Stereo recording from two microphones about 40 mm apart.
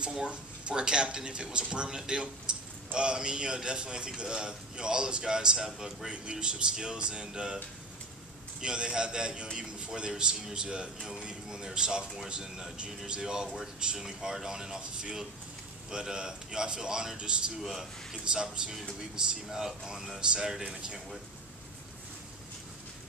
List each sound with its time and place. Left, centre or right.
0.1 s a man's voice: right
13.9 s a man's voice: centre